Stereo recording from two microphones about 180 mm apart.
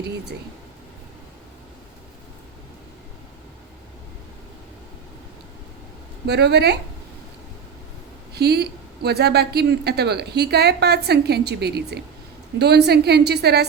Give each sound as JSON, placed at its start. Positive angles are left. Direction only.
{"t": 6.2, "sound": "speech", "side_deg": -65}
{"t": 8.3, "sound": "speech", "side_deg": -65}